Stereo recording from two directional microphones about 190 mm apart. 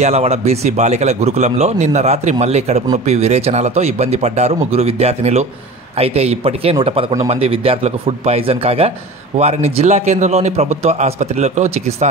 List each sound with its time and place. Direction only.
0.0 s a man's voice: 35° right (ahead or behind)